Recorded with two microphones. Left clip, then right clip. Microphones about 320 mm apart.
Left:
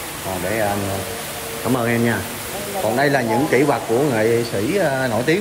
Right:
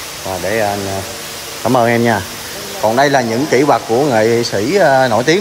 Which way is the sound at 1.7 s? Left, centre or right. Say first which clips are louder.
Right 8 dB; centre.